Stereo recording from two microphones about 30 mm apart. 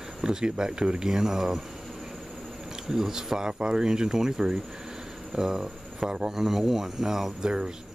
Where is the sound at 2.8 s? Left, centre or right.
Centre.